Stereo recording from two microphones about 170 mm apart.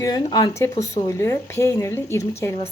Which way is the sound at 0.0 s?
20° left (ahead or behind).